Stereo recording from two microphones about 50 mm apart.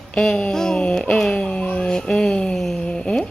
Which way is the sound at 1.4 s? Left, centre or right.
Left.